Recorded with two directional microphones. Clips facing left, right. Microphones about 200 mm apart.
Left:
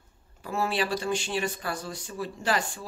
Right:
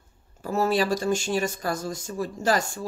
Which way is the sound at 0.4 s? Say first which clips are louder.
Right 5 dB; 40° right (ahead or behind).